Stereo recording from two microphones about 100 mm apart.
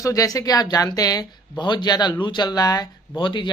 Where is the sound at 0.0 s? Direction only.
35° left (ahead or behind).